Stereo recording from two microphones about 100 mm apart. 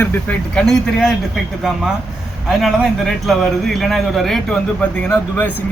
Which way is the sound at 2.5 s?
Centre (ahead or behind).